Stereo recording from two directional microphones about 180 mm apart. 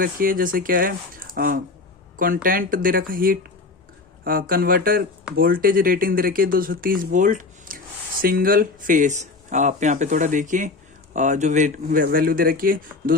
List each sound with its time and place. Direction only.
0.0 s speech: 50° right (ahead or behind)